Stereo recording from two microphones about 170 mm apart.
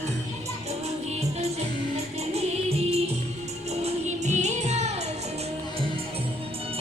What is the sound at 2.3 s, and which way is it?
Music, 35° right (ahead or behind).